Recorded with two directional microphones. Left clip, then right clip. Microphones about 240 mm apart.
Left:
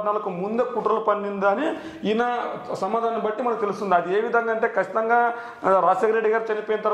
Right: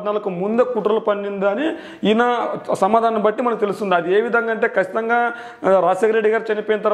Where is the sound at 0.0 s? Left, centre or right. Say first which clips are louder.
Right 3 dB; right.